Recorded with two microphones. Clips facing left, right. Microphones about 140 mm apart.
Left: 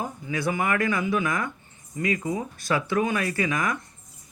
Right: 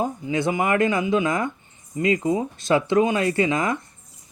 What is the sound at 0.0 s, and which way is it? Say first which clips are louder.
Speech: right 5 dB; 20° right (ahead or behind).